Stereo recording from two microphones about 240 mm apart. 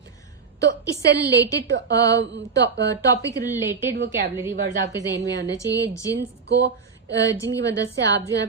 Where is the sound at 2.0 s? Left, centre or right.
Centre.